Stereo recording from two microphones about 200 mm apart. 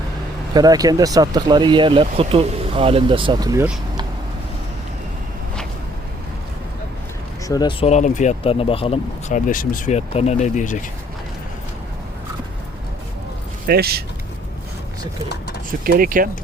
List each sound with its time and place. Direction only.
0.5 s speech: 20° right (ahead or behind)
7.4 s speech: 20° left (ahead or behind)
9.5 s speech: 45° left (ahead or behind)
13.7 s speech: 50° right (ahead or behind)
15.8 s speech: 45° right (ahead or behind)